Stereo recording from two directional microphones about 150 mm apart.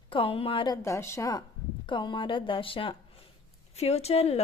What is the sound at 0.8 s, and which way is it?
Speech, 20° left (ahead or behind).